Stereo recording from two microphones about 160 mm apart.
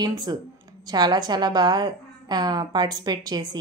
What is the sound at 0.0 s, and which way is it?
A woman's voice, 25° right (ahead or behind).